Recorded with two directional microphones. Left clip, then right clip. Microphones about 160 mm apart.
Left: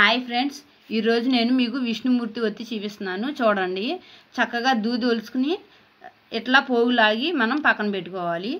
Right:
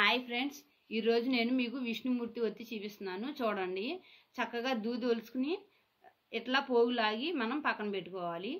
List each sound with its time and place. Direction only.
0.0 s a woman's voice: 50° left (ahead or behind)